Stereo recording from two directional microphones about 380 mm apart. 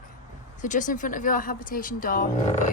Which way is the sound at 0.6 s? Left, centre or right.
Centre.